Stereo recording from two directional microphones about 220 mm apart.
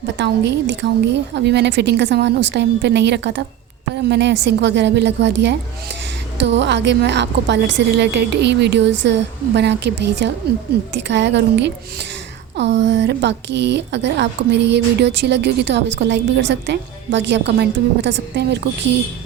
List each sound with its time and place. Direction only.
0.2 s a woman's voice: 50° right (ahead or behind)